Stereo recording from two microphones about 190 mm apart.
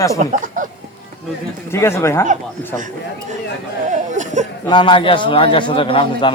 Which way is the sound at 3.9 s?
40° right (ahead or behind).